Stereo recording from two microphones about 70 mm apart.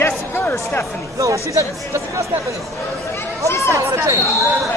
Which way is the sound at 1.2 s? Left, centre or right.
Right.